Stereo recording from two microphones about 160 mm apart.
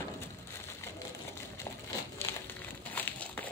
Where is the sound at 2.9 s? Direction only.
10° left (ahead or behind).